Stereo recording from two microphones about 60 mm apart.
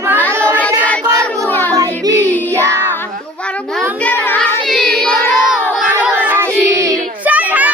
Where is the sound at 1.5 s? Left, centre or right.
Left.